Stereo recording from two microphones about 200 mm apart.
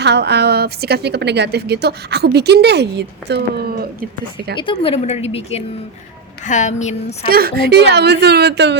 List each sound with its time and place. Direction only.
0.0 s a woman's voice: 55° right (ahead or behind)
4.5 s speech: 25° left (ahead or behind)
7.3 s a woman's voice: 50° right (ahead or behind)